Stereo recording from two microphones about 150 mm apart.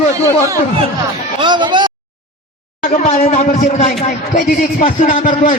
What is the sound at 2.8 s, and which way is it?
A man's voice, 60° left (ahead or behind).